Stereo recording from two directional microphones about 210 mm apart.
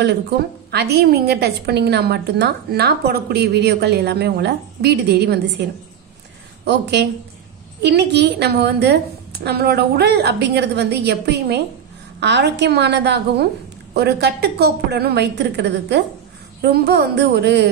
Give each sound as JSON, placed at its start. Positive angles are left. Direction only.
{"t": 0.7, "sound": "a woman's voice", "side_deg": -50}